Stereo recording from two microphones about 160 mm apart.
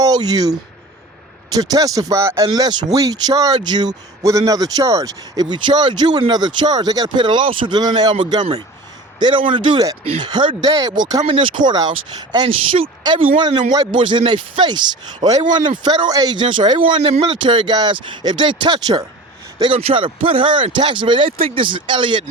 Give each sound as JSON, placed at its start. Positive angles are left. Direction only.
{"t": 0.0, "sound": "speech", "side_deg": -25}
{"t": 1.5, "sound": "speech", "side_deg": -25}